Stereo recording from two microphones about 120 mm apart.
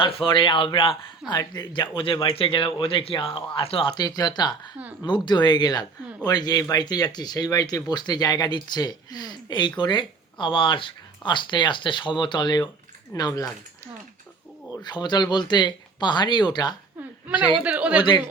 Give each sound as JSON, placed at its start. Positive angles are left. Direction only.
{"t": 0.0, "sound": "speech", "side_deg": 45}
{"t": 14.8, "sound": "speech", "side_deg": 35}
{"t": 17.6, "sound": "speech", "side_deg": -10}